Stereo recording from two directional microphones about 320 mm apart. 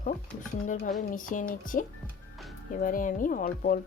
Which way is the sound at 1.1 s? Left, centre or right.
Left.